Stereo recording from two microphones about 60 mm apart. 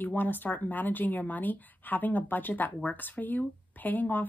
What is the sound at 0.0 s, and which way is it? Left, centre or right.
A woman's voice, left.